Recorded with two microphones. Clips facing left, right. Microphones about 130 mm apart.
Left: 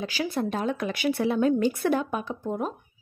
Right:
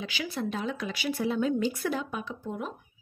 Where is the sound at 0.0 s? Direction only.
40° left (ahead or behind).